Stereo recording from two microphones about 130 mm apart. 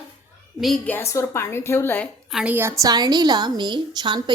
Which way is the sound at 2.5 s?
20° right (ahead or behind).